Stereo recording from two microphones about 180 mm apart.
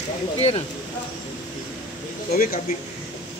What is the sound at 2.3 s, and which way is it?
Speech, 50° left (ahead or behind).